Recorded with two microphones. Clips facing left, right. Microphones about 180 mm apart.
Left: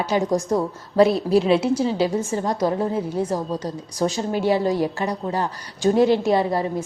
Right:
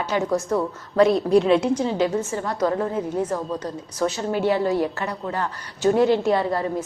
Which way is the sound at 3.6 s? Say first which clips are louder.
Left 1 dB; 10° left (ahead or behind).